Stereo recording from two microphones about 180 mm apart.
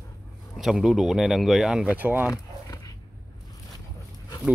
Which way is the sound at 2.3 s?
20° left (ahead or behind).